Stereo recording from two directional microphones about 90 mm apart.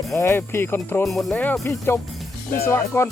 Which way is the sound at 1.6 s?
30° left (ahead or behind).